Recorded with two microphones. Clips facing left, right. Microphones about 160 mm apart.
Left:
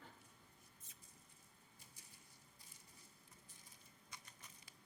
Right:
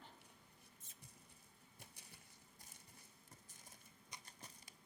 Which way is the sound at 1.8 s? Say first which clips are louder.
Right 6 dB; 70° right (ahead or behind).